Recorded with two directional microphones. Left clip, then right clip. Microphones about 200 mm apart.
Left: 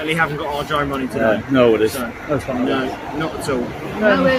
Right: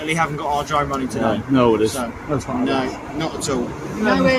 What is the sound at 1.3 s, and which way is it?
Speech, 45° right (ahead or behind).